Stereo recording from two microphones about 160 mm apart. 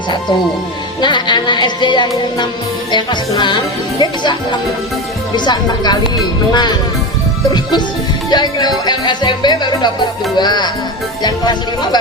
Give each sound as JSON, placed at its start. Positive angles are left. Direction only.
{"t": 1.0, "sound": "speech", "side_deg": 30}
{"t": 5.5, "sound": "speech", "side_deg": 25}